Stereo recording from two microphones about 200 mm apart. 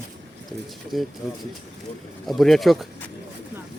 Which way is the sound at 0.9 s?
Centre (ahead or behind).